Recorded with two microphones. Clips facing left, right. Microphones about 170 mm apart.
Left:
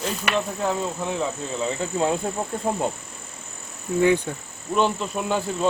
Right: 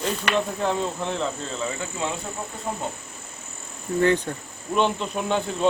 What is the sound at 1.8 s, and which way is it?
Speech, 40° left (ahead or behind).